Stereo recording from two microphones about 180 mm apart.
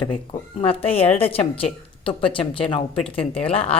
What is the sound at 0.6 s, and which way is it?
Speech, 30° left (ahead or behind).